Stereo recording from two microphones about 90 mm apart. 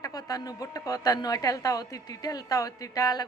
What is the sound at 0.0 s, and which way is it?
A woman's voice, 45° left (ahead or behind).